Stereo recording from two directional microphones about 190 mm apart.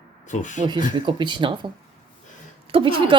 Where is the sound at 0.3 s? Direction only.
40° left (ahead or behind).